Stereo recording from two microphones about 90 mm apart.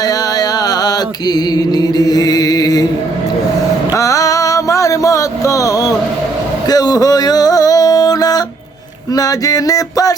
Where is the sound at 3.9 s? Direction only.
40° left (ahead or behind).